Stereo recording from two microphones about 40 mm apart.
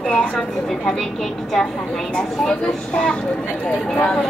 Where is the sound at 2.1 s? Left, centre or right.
Left.